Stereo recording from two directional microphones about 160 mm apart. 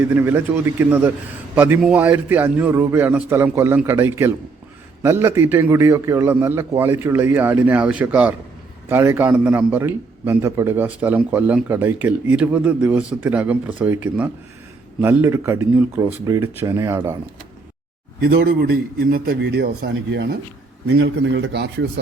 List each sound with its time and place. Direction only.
0.0 s a man's voice: 10° right (ahead or behind)
18.2 s a man's voice: 70° right (ahead or behind); by 20.2 s 90° right
21.5 s speech: 90° right